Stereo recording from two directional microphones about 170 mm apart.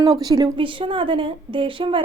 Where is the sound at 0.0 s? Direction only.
20° right (ahead or behind).